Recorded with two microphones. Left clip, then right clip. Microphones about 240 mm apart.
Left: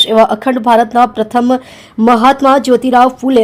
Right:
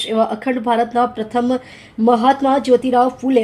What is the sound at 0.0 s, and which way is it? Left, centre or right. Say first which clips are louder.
Speech: left 9 dB; left.